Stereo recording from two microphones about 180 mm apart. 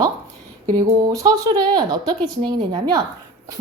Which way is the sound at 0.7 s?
20° right (ahead or behind).